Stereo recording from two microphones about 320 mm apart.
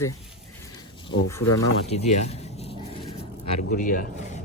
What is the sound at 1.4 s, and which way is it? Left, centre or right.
Speech, left.